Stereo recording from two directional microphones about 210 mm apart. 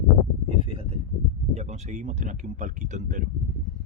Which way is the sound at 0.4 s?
25° right (ahead or behind).